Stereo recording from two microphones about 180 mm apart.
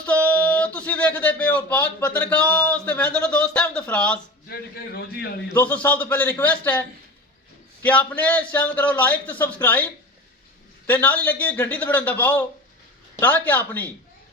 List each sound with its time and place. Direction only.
0.0 s speech: 10° left (ahead or behind)
4.4 s a man's voice: 60° left (ahead or behind)
5.5 s a man's voice: 10° left (ahead or behind)